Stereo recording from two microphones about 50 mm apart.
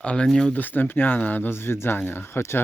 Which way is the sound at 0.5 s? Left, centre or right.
Left.